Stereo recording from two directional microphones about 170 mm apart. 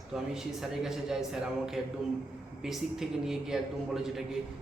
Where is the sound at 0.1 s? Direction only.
5° right (ahead or behind).